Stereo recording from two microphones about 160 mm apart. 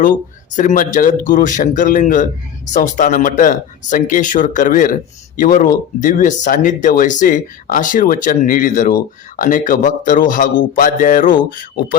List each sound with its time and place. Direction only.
0.0 s speech: 55° left (ahead or behind)